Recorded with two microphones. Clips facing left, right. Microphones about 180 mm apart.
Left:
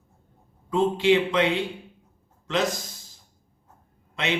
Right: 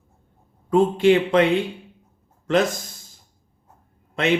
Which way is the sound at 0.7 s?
50° right (ahead or behind).